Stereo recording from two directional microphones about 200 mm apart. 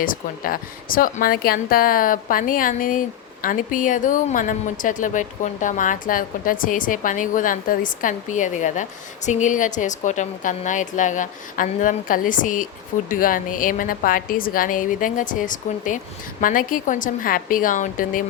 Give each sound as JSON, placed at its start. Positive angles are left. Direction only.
{"t": 0.0, "sound": "a woman's voice", "side_deg": 45}